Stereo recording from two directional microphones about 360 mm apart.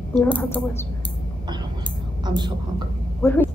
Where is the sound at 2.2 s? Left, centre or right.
Centre.